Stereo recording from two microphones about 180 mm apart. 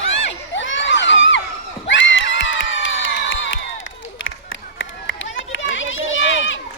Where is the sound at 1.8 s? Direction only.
90° left.